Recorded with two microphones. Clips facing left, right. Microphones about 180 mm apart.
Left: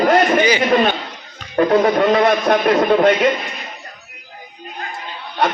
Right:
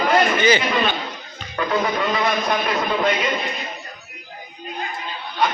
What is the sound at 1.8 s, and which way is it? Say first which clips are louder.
A man's voice: left 8 dB; 60° left (ahead or behind).